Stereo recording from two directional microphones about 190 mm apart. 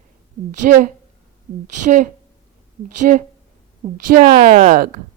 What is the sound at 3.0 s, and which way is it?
Speech, 45° right (ahead or behind).